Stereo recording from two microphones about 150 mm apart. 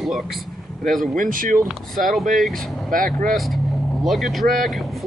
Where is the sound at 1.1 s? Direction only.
65° right (ahead or behind).